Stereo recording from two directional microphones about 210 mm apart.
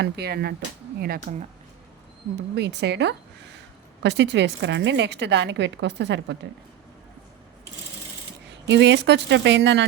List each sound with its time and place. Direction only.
0.0 s speech: 50° right (ahead or behind)
2.6 s a woman's voice: 55° right (ahead or behind)
8.6 s a woman's voice: 55° right (ahead or behind)